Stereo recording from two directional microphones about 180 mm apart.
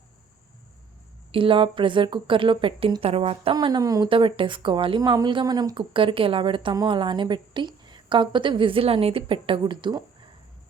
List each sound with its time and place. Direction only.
1.3 s speech: 30° right (ahead or behind)